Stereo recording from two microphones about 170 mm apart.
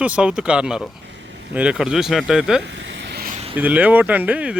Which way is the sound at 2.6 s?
90° right.